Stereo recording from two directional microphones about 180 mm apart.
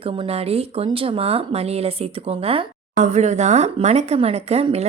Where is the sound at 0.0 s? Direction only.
30° right (ahead or behind).